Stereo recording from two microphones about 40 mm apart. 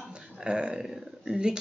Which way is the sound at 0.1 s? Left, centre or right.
Right.